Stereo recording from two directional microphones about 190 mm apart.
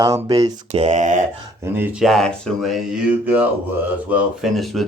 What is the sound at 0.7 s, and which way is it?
Speech, 35° right (ahead or behind).